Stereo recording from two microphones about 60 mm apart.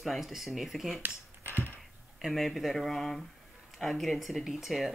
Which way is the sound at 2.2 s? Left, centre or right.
Centre.